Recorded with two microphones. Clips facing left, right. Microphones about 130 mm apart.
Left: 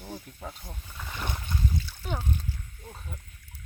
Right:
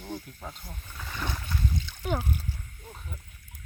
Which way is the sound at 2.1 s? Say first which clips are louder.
Right 3 dB; 10° right (ahead or behind).